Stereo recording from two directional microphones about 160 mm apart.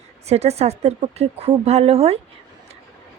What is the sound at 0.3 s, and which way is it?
A woman's voice, 40° right (ahead or behind).